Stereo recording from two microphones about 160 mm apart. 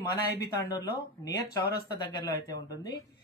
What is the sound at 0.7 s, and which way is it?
Speech, 25° left (ahead or behind).